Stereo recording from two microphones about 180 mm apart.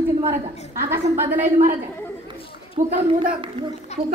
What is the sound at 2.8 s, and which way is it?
Speech, 45° right (ahead or behind).